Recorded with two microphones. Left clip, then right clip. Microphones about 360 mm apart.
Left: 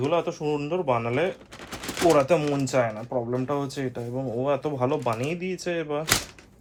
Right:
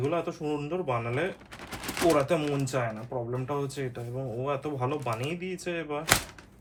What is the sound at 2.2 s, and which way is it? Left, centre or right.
Speech, centre.